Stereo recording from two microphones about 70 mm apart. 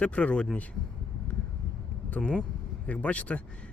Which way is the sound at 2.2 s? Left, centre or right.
Centre.